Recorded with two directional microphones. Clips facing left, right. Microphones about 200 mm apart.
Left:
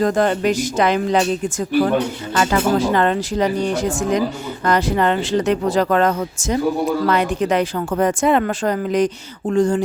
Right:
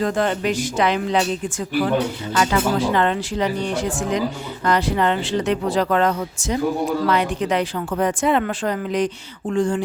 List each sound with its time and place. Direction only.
0.0 s speech: 40° left (ahead or behind)